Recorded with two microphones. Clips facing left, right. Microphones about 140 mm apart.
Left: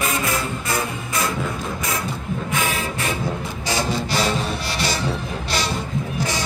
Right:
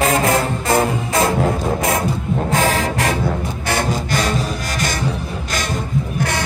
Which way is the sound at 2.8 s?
90° right.